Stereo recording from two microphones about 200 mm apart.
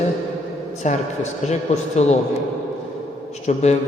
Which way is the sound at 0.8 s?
35° left (ahead or behind).